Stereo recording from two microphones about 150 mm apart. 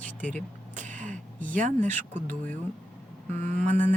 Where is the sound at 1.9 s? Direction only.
55° right (ahead or behind).